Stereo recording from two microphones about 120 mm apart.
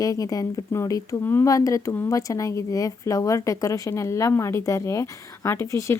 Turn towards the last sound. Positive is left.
turn(degrees=25)  # may be behind; listen again after turning